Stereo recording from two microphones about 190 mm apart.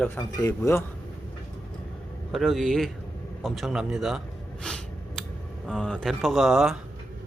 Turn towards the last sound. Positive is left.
turn(degrees=0)  # may be behind; listen again after turning